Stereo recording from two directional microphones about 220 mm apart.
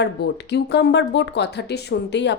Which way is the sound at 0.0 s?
50° left (ahead or behind).